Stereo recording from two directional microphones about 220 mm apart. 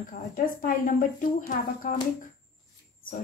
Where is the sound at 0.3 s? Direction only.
40° left (ahead or behind).